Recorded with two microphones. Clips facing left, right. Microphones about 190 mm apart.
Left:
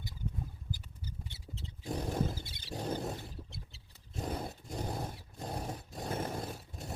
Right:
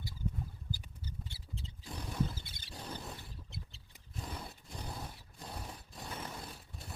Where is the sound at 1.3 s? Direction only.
25° left (ahead or behind).